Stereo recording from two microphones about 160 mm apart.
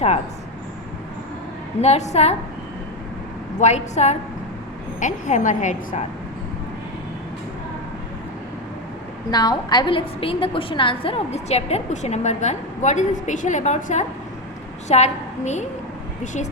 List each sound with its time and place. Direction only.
1.8 s a woman's voice: 45° left (ahead or behind)
3.6 s a woman's voice: 45° left (ahead or behind)
9.3 s a woman's voice: 25° left (ahead or behind); by 16.5 s 50° left (ahead or behind)